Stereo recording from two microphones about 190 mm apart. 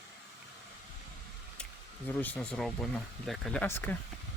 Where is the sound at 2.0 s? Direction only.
10° left (ahead or behind).